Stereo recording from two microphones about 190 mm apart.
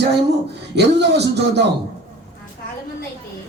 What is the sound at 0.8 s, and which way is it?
Music, 65° right (ahead or behind).